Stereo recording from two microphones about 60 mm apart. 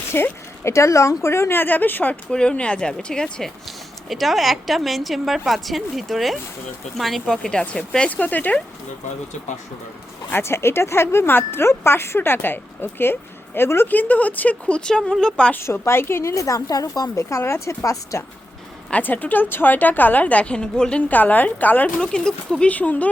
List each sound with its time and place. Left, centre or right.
0.1 s speech: left
2.3 s speech: centre
3.4 s a woman's voice: centre
7.6 s a woman's voice: centre
8.1 s a woman's voice: left
10.3 s speech: left
13.9 s a woman's voice: left
15.1 s a woman's voice: centre
15.6 s speech: left
16.3 s a woman's voice: left
19.0 s a woman's voice: left; by 21.0 s centre
21.1 s a woman's voice: left
22.0 s speech: centre
22.7 s a woman's voice: left